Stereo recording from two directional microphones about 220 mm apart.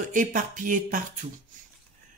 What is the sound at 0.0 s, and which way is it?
Speech, 35° right (ahead or behind).